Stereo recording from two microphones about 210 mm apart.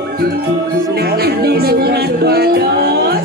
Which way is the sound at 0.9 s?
50° right (ahead or behind).